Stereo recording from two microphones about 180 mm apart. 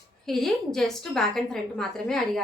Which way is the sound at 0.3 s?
Centre (ahead or behind).